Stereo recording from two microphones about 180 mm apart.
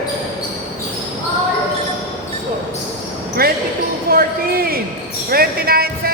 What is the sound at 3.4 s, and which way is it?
Basketball bounce, 55° right (ahead or behind).